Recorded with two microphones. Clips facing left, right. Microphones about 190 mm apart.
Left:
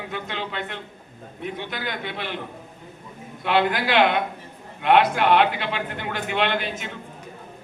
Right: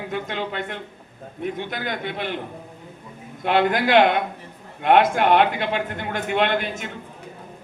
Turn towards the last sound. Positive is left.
turn(degrees=-50)  # may be behind; listen again after turning